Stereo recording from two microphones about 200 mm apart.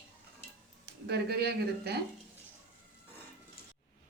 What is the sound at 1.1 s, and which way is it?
Speech, 55° right (ahead or behind).